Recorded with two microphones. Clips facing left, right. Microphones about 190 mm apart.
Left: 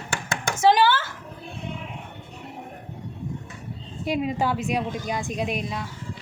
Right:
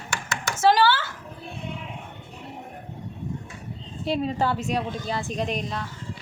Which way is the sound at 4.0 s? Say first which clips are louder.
Even; 10° left (ahead or behind).